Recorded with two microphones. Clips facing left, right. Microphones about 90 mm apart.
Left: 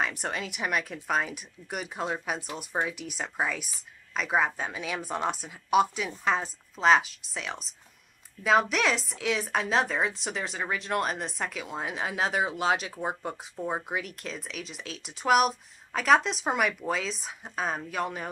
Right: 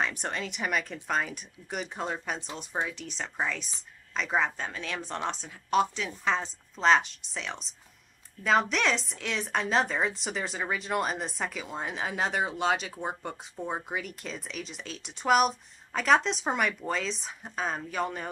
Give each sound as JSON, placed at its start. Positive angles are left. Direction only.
{"t": 0.0, "sound": "a woman's voice", "side_deg": 5}